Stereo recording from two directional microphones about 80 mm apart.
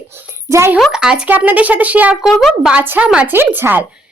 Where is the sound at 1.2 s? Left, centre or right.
Right.